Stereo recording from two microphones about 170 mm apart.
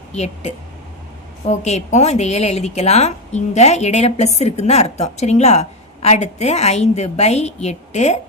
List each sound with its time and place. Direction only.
0.1 s a woman's voice: 40° left (ahead or behind)